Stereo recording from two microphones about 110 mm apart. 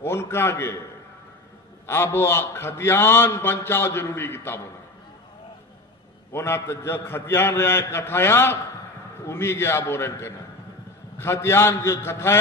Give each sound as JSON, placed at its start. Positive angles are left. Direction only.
{"t": 0.0, "sound": "a man's voice", "side_deg": 20}
{"t": 1.9, "sound": "a man's voice", "side_deg": 20}
{"t": 6.3, "sound": "a man's voice", "side_deg": 25}